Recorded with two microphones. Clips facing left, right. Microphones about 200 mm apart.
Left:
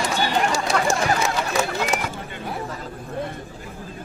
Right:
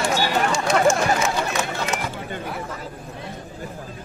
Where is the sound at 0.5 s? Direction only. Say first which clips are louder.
Right 3 dB; 35° left (ahead or behind).